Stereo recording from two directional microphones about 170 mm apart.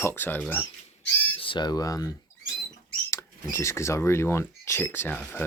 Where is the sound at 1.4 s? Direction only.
30° left (ahead or behind).